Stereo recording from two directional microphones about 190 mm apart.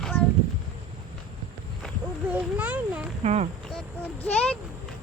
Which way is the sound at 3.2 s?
35° right (ahead or behind).